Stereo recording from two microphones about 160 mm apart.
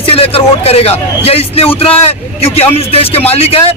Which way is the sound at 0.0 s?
35° left (ahead or behind).